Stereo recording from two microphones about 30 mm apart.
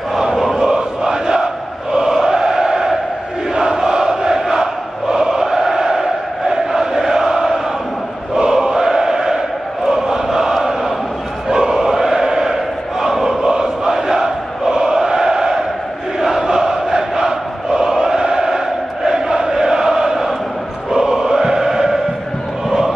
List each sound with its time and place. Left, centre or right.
0.1 s chant: centre
0.5 s chant: right
3.5 s a sound: right
4.4 s chant: centre
13.0 s crowd: centre
14.0 s chant: centre
16.4 s crowd: right
19.0 s chant: right
20.9 s choir: right